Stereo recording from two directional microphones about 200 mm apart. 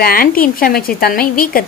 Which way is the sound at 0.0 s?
45° left (ahead or behind).